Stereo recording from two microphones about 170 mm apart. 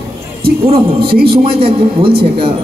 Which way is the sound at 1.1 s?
70° right (ahead or behind).